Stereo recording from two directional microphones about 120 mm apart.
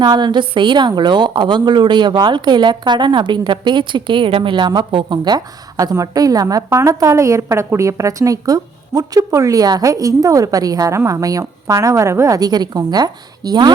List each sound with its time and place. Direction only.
0.0 s a woman's voice: 40° right (ahead or behind)